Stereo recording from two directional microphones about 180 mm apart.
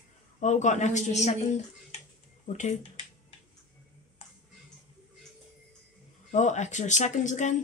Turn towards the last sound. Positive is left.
turn(degrees=40)  # may be behind; listen again after turning